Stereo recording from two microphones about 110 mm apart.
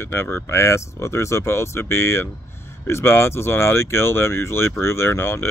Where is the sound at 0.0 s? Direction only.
20° left (ahead or behind).